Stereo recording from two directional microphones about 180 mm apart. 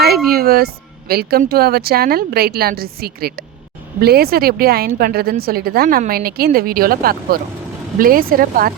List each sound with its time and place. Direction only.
0.0 s a woman's voice: 55° right (ahead or behind)